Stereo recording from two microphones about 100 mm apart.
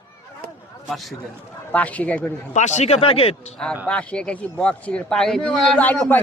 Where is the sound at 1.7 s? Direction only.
15° left (ahead or behind).